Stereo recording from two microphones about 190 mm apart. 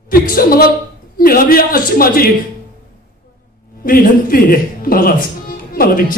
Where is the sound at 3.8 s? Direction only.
50° left (ahead or behind).